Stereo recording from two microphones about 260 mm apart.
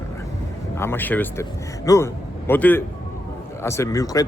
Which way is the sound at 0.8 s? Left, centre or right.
Centre.